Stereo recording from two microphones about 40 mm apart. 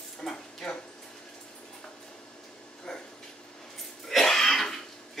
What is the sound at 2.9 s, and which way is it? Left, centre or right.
Dog, centre.